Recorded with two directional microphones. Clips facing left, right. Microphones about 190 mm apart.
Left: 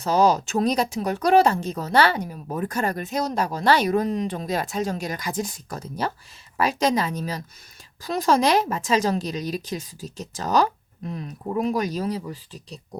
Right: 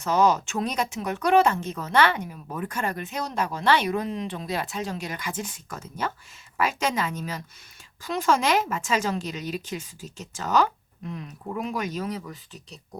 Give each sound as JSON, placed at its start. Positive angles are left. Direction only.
{"t": 0.0, "sound": "speech", "side_deg": 35}